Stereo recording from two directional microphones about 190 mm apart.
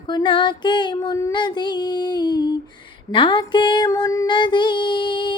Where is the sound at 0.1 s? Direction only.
25° left (ahead or behind).